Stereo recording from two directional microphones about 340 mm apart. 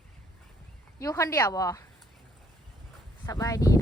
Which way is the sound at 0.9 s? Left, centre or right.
Centre.